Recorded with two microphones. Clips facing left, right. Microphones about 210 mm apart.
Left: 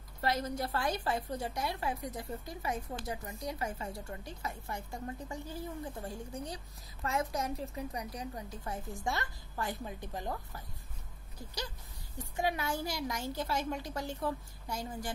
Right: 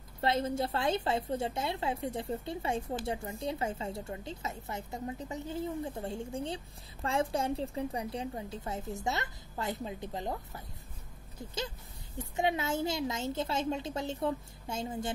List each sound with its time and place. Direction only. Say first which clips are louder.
0.2 s a woman's voice: right 3 dB; 25° right (ahead or behind)
12.2 s a woman's voice: right 3 dB; 25° right (ahead or behind)